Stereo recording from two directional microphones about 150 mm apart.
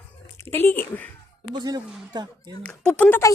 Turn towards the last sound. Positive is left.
turn(degrees=15)  # may be behind; listen again after turning